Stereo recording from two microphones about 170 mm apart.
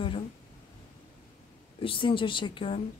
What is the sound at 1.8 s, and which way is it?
Speech, 30° left (ahead or behind).